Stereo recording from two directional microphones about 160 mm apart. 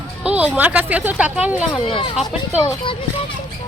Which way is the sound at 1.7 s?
30° left (ahead or behind).